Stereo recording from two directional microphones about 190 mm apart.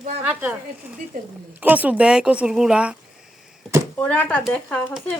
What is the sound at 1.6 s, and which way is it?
Speech, 10° right (ahead or behind).